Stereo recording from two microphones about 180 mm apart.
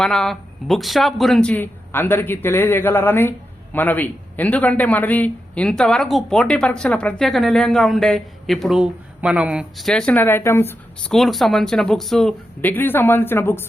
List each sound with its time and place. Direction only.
0.0 s speech: 5° left (ahead or behind)
11.1 s speech: centre (ahead or behind)